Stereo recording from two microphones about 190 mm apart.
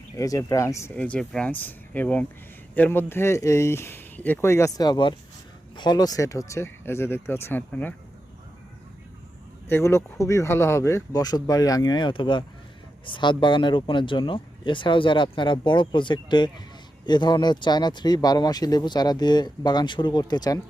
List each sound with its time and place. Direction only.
0.2 s speech: 20° left (ahead or behind)
9.6 s speech: 15° left (ahead or behind)